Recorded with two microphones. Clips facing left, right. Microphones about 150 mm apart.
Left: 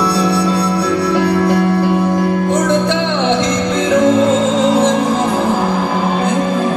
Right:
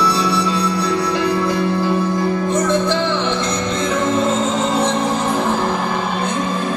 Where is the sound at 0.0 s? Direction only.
60° left (ahead or behind); by 4.9 s 90° left.